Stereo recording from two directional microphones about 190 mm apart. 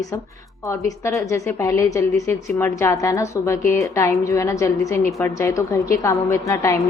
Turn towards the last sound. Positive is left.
turn(degrees=15)  # may be behind; listen again after turning